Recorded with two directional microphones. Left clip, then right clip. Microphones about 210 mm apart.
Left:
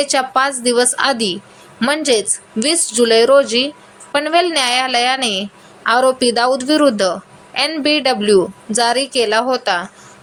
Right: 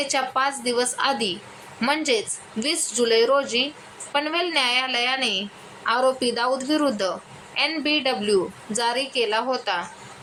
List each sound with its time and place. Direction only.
0.0 s a woman's voice: 25° left (ahead or behind)